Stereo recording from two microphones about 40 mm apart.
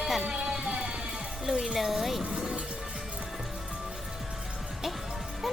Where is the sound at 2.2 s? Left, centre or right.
Right.